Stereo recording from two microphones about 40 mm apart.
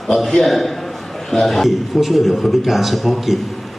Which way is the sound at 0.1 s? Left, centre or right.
Centre.